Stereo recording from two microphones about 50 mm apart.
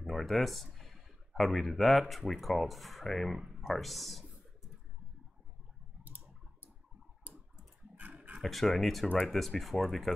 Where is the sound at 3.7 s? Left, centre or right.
Centre.